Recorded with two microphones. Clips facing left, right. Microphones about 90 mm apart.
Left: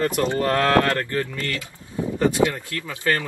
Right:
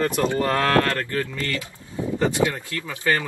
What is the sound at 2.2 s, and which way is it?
Speech, 20° right (ahead or behind).